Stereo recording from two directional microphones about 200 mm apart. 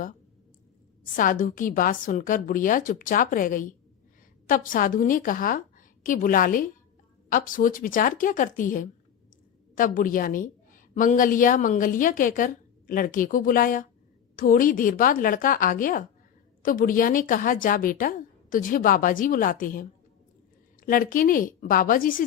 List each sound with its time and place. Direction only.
1.1 s a woman's voice: 40° left (ahead or behind)